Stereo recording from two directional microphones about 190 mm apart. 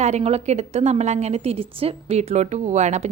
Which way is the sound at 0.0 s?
35° right (ahead or behind).